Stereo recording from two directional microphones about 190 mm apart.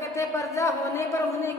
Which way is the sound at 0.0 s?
15° left (ahead or behind).